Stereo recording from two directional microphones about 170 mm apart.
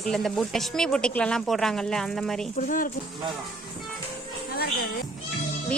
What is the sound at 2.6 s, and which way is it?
Speech, 50° left (ahead or behind).